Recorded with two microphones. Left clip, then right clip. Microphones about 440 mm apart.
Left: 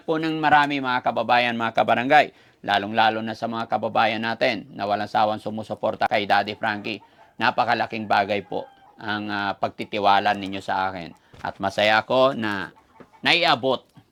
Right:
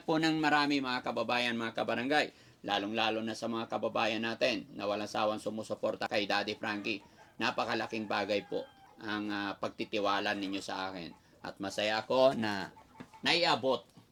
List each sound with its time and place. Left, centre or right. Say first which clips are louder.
0.1 s speech: left 6 dB; centre
0.4 s speech: left 11 dB; centre; by 12.1 s left
12.1 s speech: left 8 dB; centre